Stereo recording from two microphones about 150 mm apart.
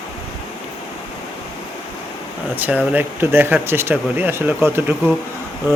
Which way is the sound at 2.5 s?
10° right (ahead or behind).